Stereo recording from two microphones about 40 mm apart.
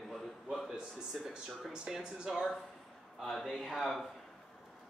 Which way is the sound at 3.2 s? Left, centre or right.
Centre.